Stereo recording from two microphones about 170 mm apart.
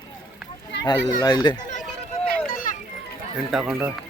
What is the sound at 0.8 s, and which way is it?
Speech, 25° left (ahead or behind).